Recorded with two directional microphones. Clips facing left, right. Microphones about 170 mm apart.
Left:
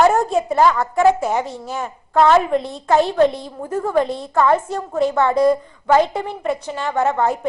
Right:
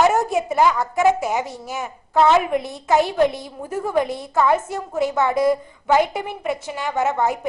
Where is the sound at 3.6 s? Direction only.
15° right (ahead or behind).